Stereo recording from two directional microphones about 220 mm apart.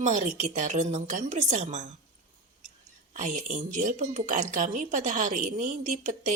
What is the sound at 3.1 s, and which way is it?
Speech, 35° right (ahead or behind).